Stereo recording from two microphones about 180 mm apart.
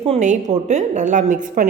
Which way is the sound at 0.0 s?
40° right (ahead or behind).